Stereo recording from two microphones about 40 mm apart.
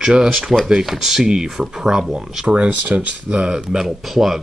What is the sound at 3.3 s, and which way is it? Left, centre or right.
Speech, right.